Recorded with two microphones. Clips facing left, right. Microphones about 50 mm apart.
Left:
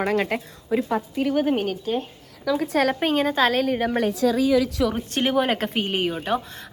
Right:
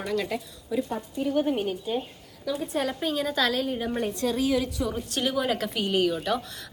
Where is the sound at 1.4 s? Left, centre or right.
Left.